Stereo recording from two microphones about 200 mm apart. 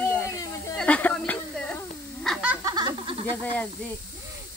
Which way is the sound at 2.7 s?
20° right (ahead or behind).